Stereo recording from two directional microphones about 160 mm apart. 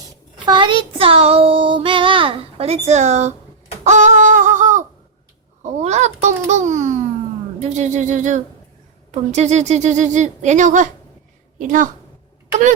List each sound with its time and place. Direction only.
0.4 s child singing: 30° right (ahead or behind); by 3.3 s 45° right (ahead or behind)
3.8 s a sound: 50° right (ahead or behind)
5.6 s a woman's voice: 45° right (ahead or behind)